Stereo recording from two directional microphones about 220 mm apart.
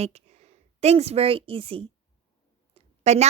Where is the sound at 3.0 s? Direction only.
30° right (ahead or behind).